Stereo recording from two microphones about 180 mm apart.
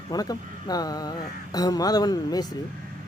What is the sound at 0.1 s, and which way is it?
Speech, 20° left (ahead or behind).